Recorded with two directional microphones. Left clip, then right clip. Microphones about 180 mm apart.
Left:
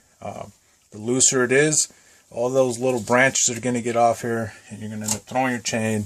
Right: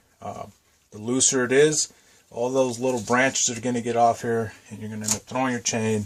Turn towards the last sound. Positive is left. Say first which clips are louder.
# left 1 dB
turn(degrees=45)  # may be behind; listen again after turning